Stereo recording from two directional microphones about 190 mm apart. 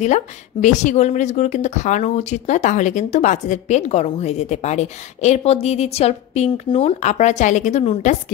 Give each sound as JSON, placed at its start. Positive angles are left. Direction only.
{"t": 0.0, "sound": "speech", "side_deg": 40}